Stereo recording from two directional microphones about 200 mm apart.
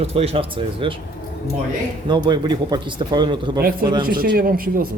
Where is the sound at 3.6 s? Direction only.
50° right (ahead or behind).